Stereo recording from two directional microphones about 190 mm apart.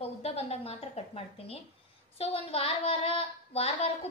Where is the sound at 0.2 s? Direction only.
30° left (ahead or behind).